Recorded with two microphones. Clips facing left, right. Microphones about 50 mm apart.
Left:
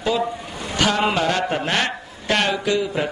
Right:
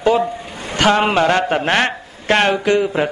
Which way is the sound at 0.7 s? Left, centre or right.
Right.